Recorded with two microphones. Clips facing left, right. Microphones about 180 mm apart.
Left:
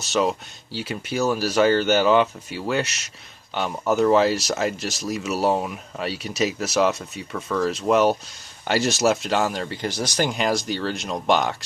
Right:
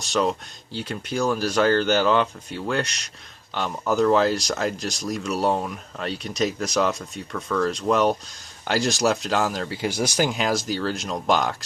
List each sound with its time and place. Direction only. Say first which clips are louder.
0.0 s speech: left 1 dB; 5° left (ahead or behind)